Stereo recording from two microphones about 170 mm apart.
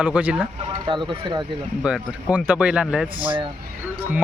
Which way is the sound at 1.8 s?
10° right (ahead or behind).